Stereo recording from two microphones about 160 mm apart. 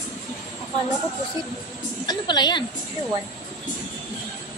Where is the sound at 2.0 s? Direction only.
25° left (ahead or behind).